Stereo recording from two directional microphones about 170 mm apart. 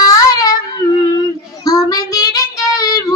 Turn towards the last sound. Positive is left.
turn(degrees=20)  # may be behind; listen again after turning